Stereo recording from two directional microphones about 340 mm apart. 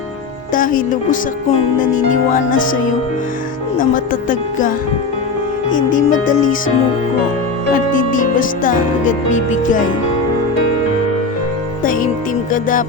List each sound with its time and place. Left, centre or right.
0.5 s music: left
5.7 s music: left
7.9 s music: left
11.8 s speech: left
12.5 s music: left